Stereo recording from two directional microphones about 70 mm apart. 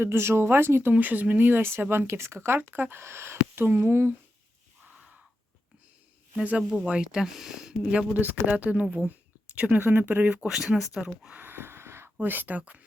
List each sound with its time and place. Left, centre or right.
0.0 s speech: right
4.9 s crow: centre
6.3 s speech: right
10.5 s speech: centre
11.3 s a sound: right
12.2 s speech: right